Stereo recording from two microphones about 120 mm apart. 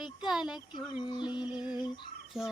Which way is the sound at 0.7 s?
40° left (ahead or behind).